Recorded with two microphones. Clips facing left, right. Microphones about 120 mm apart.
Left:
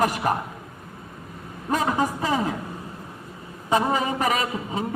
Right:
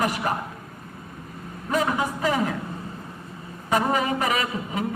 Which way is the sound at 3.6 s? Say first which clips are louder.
Left 1 dB; 25° left (ahead or behind).